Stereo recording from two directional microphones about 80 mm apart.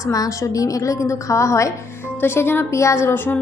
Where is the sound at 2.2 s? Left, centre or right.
Left.